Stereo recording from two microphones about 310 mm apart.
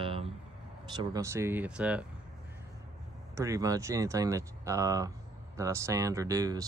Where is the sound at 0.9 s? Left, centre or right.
Centre.